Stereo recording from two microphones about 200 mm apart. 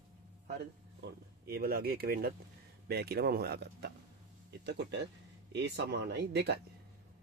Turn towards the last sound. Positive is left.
turn(degrees=-55)  # may be behind; listen again after turning